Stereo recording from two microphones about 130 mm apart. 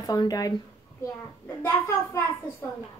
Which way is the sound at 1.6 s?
20° left (ahead or behind).